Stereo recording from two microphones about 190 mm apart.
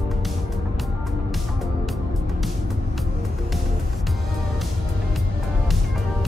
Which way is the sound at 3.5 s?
Centre (ahead or behind).